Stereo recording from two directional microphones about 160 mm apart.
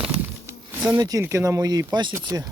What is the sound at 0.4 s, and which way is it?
Speech, 20° right (ahead or behind).